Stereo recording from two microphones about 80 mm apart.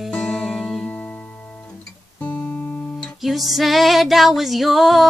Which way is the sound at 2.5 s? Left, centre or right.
Centre.